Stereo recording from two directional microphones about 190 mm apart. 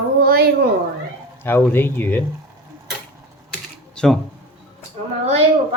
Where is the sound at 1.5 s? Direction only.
10° left (ahead or behind).